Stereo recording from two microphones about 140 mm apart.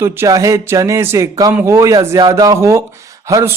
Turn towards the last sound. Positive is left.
turn(degrees=-25)  # may be behind; listen again after turning